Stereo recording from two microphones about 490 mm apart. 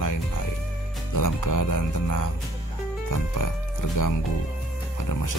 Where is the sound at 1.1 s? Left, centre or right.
Left.